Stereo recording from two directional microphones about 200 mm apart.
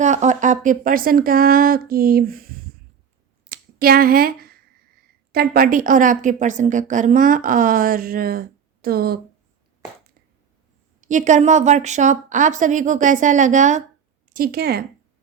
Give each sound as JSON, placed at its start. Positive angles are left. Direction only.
{"t": 0.0, "sound": "a woman's voice", "side_deg": -35}
{"t": 3.5, "sound": "a sound", "side_deg": -50}
{"t": 5.3, "sound": "a woman's voice", "side_deg": -50}
{"t": 11.0, "sound": "speech", "side_deg": -40}
{"t": 14.3, "sound": "a woman's voice", "side_deg": -50}